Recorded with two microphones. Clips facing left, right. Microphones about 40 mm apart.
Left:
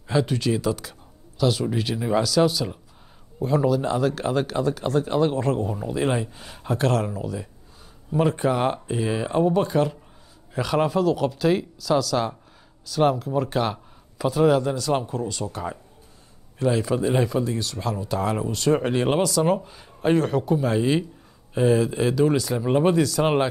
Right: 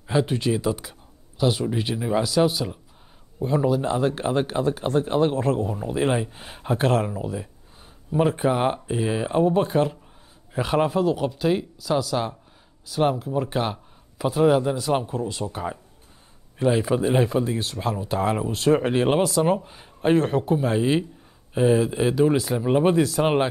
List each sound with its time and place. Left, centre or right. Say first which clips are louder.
0.0 s a man's voice: even; centre
2.0 s speech: left 1 dB; centre
2.2 s speech: left 1 dB; right
5.3 s speech: right 1 dB; centre
5.9 s a man's voice: right 2 dB; centre
8.1 s a man's voice: even; centre